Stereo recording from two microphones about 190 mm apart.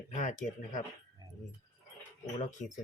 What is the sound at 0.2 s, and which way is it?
Speech, 40° left (ahead or behind).